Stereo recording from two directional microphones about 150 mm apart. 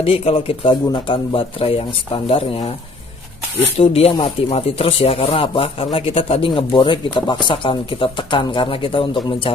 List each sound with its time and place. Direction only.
0.0 s speech: 40° left (ahead or behind)
3.8 s speech: 40° left (ahead or behind)